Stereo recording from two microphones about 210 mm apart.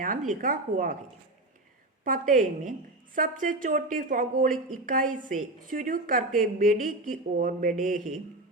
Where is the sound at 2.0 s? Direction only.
40° right (ahead or behind).